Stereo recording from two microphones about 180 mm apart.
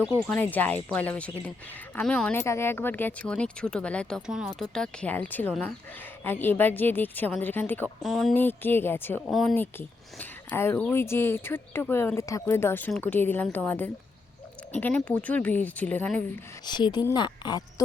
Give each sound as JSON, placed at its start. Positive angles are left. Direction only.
{"t": 0.2, "sound": "speech", "side_deg": 10}
{"t": 9.2, "sound": "speech", "side_deg": 0}
{"t": 9.6, "sound": "speech", "side_deg": 10}
{"t": 16.6, "sound": "a woman's voice", "side_deg": 25}